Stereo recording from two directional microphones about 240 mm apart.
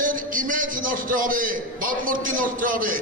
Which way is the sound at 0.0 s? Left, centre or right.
Right.